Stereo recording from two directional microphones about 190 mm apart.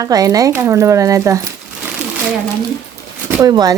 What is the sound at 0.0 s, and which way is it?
Speech, 20° right (ahead or behind).